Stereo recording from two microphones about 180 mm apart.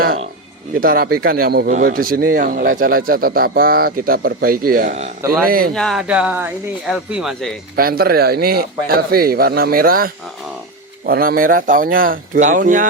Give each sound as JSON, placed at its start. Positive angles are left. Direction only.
{"t": 0.8, "sound": "a man's voice", "side_deg": -55}
{"t": 5.5, "sound": "speech", "side_deg": -55}
{"t": 5.7, "sound": "speech", "side_deg": 0}
{"t": 7.8, "sound": "a man's voice", "side_deg": -55}